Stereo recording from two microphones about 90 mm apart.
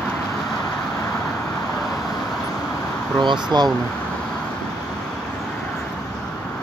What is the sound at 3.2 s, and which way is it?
Speech, 55° right (ahead or behind).